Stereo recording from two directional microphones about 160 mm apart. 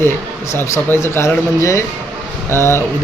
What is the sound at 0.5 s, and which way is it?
Speech, 15° left (ahead or behind).